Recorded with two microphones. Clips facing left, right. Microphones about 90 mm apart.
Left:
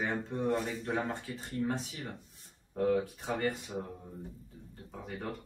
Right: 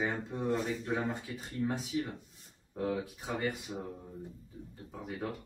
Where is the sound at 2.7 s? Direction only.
5° right (ahead or behind).